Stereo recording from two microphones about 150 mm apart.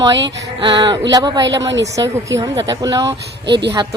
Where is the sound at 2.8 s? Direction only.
25° right (ahead or behind).